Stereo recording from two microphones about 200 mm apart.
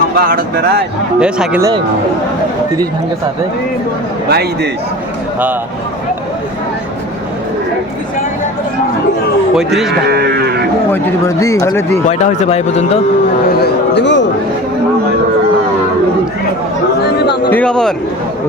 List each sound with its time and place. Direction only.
0.2 s speech: 45° right (ahead or behind)
1.2 s speech: 5° right (ahead or behind)
4.3 s speech: 55° right (ahead or behind)
9.6 s speech: centre (ahead or behind)
10.1 s speech: 55° right (ahead or behind)
10.9 s speech: 15° left (ahead or behind)
12.0 s a man's voice: 35° left (ahead or behind)
13.6 s speech: 60° left (ahead or behind)
17.5 s speech: 5° left (ahead or behind)